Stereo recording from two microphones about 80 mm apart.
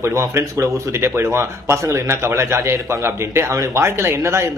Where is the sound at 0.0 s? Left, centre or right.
Right.